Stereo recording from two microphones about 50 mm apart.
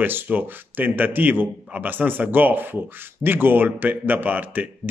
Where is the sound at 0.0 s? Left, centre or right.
Right.